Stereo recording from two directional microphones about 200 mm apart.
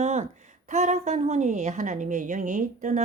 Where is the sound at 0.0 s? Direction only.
35° right (ahead or behind).